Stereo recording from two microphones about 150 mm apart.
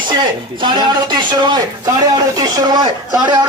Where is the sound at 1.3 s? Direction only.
30° right (ahead or behind).